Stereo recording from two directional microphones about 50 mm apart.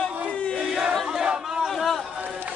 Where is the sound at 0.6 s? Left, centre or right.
Centre.